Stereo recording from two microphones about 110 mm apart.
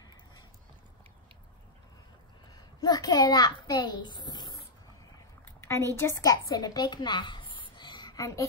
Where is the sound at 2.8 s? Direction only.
35° left (ahead or behind).